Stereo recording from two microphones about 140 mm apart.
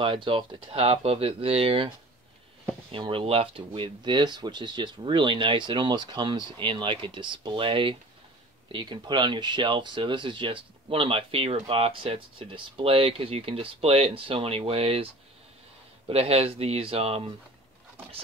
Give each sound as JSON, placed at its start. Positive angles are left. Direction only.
{"t": 0.0, "sound": "speech", "side_deg": -35}
{"t": 2.9, "sound": "speech", "side_deg": -40}
{"t": 16.1, "sound": "speech", "side_deg": -45}